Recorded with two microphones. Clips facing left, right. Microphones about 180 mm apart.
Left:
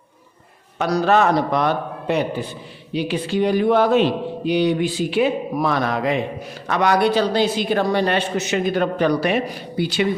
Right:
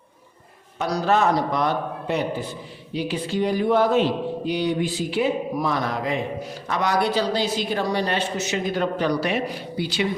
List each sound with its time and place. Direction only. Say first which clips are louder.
0.8 s a man's voice: left 4 dB; 70° left (ahead or behind); by 10.0 s 55° left (ahead or behind)